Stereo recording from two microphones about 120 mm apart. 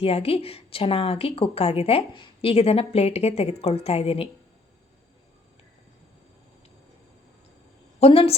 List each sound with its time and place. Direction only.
0.0 s a woman's voice: 55° left (ahead or behind)
7.9 s a woman's voice: 55° left (ahead or behind)